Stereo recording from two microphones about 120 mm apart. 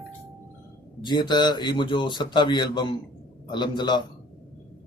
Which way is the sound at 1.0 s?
40° left (ahead or behind).